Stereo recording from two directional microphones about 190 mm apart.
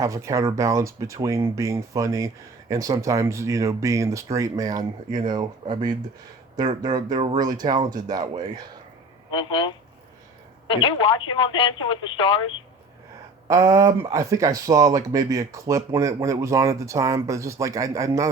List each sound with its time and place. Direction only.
0.0 s speech: 15° right (ahead or behind)
9.3 s speech: 25° left (ahead or behind)
13.5 s speech: 15° right (ahead or behind)